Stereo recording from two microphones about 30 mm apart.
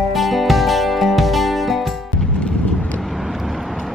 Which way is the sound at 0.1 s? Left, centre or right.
Centre.